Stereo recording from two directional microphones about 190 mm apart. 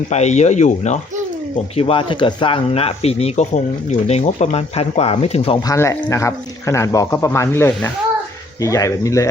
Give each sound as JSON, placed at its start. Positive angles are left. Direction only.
{"t": 0.1, "sound": "speech", "side_deg": 35}
{"t": 5.6, "sound": "speech", "side_deg": 15}